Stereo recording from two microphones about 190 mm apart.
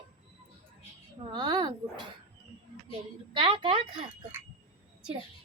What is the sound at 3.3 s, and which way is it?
Speech, 25° right (ahead or behind).